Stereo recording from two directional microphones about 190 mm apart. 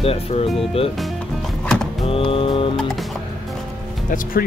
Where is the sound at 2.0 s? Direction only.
30° left (ahead or behind).